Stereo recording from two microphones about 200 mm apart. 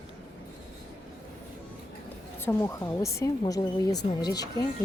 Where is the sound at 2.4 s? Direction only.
15° left (ahead or behind).